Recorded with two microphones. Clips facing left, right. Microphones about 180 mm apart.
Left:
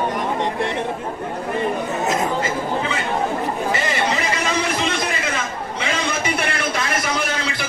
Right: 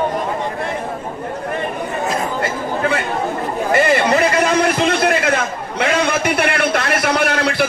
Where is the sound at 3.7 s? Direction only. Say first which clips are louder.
Right 11 dB; 60° right (ahead or behind).